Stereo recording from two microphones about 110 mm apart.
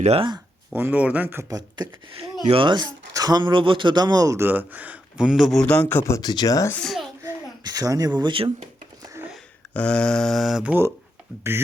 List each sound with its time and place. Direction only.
0.2 s speech: 45° right (ahead or behind)
0.7 s speech: 20° right (ahead or behind)
1.5 s speech: 35° right (ahead or behind)
2.5 s speech: 50° right (ahead or behind)
4.4 s speech: 15° right (ahead or behind); by 5.6 s centre (ahead or behind)
5.6 s mantra: 10° left (ahead or behind)
6.1 s speech: 40° left (ahead or behind)
6.7 s a child's voice: 5° left (ahead or behind)
7.2 s babbling: 35° right (ahead or behind)
8.2 s speech: 50° right (ahead or behind)
9.7 s mantra: 10° left (ahead or behind)
10.6 s speech: 15° right (ahead or behind)